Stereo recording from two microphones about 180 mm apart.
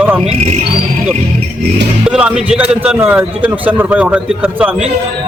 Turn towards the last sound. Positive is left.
turn(degrees=-10)  # may be behind; listen again after turning